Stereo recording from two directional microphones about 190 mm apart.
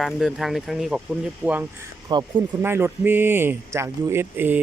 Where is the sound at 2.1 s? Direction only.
20° right (ahead or behind).